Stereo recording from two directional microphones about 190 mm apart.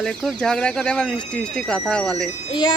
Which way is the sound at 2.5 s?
25° left (ahead or behind).